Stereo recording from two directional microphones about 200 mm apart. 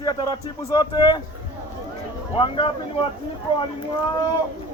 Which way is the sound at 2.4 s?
25° left (ahead or behind).